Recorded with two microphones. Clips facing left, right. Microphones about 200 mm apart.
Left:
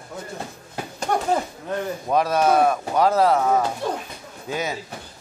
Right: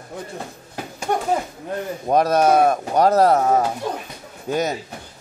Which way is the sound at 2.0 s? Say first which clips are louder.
Right 3 dB; 40° right (ahead or behind).